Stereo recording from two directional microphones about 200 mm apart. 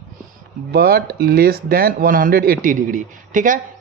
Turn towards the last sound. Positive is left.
turn(degrees=-40)  # may be behind; listen again after turning